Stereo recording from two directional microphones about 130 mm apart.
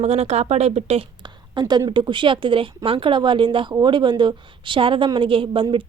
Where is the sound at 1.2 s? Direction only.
35° right (ahead or behind).